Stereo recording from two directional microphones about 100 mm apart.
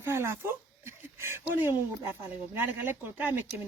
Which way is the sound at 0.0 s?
25° right (ahead or behind).